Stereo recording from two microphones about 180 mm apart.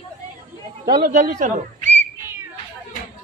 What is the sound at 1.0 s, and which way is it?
Speech, 40° right (ahead or behind).